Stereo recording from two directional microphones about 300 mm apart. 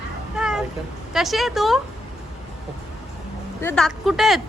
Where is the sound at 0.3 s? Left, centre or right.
Centre.